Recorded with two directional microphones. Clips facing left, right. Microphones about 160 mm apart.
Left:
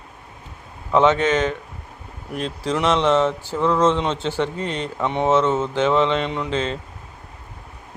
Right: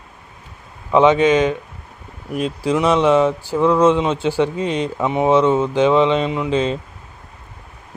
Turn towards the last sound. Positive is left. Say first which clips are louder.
# right 5 dB
turn(degrees=-15)  # may be behind; listen again after turning